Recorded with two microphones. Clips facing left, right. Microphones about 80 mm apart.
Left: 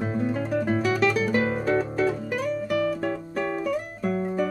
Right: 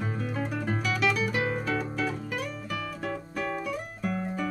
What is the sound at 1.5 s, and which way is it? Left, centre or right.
Guitar, left.